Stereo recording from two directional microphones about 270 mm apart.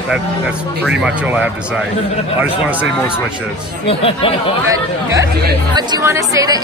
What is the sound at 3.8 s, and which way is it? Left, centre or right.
Speech, centre.